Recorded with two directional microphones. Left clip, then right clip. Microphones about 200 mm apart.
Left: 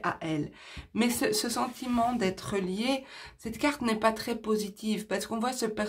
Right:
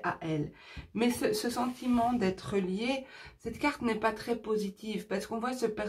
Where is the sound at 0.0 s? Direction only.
45° left (ahead or behind).